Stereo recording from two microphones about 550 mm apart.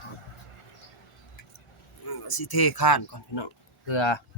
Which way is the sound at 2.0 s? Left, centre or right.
Left.